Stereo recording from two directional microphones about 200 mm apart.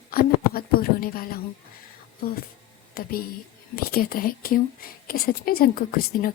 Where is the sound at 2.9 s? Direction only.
45° left (ahead or behind).